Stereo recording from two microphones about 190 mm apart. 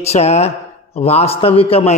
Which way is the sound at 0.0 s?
35° left (ahead or behind).